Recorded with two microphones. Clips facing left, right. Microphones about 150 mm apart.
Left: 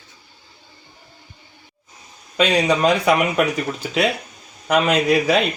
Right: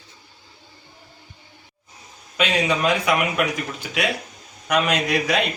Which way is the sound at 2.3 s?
35° left (ahead or behind).